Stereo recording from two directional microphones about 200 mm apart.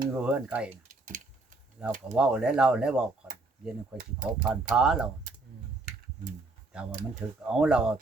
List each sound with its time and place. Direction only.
0.1 s speech: 5° right (ahead or behind)
0.7 s typing: 40° right (ahead or behind)
1.8 s speech: 5° right (ahead or behind)
3.9 s speech: 40° right (ahead or behind)
4.7 s speech: 5° right (ahead or behind)
7.4 s speech: 5° right (ahead or behind)